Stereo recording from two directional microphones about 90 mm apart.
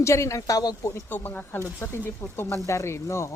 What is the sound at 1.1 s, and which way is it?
Speech, 20° left (ahead or behind).